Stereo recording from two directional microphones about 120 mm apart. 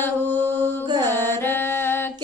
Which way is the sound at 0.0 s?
15° left (ahead or behind).